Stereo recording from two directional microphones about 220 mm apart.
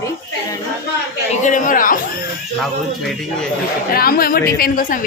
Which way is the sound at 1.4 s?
35° left (ahead or behind).